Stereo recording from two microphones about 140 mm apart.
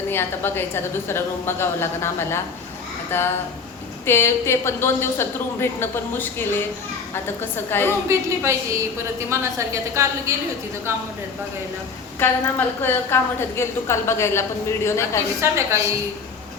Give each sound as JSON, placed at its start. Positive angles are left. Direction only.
{"t": 0.1, "sound": "a woman's voice", "side_deg": 15}
{"t": 8.0, "sound": "a woman's voice", "side_deg": -20}
{"t": 12.2, "sound": "a woman's voice", "side_deg": 15}
{"t": 15.4, "sound": "a woman's voice", "side_deg": -20}